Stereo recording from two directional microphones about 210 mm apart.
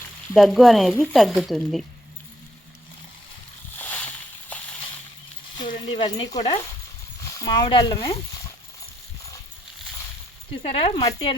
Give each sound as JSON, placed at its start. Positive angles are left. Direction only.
{"t": 0.3, "sound": "speech", "side_deg": 0}
{"t": 3.8, "sound": "a sound", "side_deg": 10}
{"t": 5.6, "sound": "speech", "side_deg": 30}
{"t": 10.7, "sound": "speech", "side_deg": 25}